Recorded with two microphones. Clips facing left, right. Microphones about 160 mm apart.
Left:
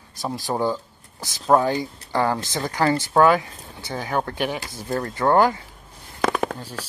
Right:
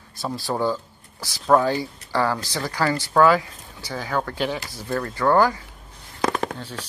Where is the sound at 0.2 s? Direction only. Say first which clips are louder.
Even; 15° left (ahead or behind).